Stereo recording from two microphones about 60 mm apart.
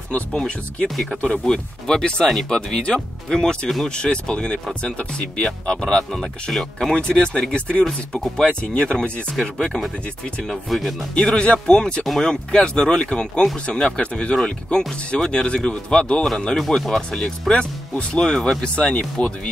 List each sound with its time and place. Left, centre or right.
0.3 s speech: centre
10.4 s speech: centre
11.1 s speech: centre